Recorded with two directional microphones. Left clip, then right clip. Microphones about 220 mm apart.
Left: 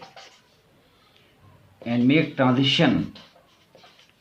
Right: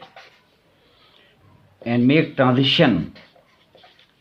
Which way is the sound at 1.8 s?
35° right (ahead or behind).